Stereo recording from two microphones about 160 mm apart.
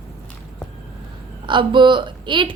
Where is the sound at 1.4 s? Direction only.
30° right (ahead or behind).